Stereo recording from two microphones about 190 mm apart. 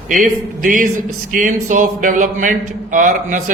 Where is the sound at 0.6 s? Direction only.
45° right (ahead or behind).